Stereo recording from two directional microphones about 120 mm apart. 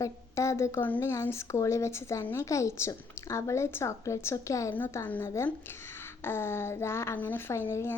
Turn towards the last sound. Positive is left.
turn(degrees=20)  # may be behind; listen again after turning